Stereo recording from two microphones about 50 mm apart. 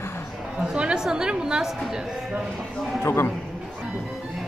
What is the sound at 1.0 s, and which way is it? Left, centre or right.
A woman's voice, centre.